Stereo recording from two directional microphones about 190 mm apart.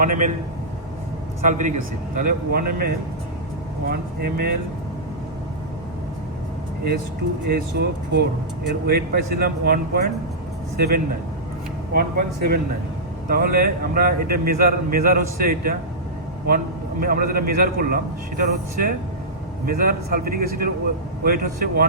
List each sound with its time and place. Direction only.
0.0 s a man's voice: 45° right (ahead or behind)
1.4 s a man's voice: 40° right (ahead or behind)
7.5 s a man's voice: 60° right (ahead or behind)
17.0 s a man's voice: 50° right (ahead or behind)